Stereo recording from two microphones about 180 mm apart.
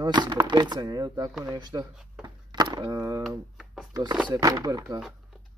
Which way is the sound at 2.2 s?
20° right (ahead or behind).